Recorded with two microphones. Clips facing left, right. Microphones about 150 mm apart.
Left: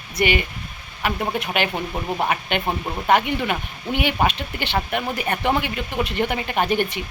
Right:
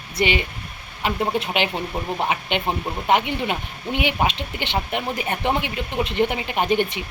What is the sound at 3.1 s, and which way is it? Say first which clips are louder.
Speech: left 1 dB; 20° right (ahead or behind).